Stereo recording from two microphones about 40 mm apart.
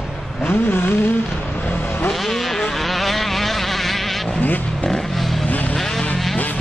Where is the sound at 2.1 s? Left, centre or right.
Centre.